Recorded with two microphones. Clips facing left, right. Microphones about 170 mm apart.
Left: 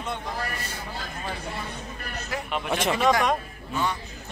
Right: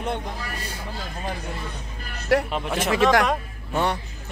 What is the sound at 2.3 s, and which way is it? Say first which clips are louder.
Speech: right 14 dB; 75° right (ahead or behind).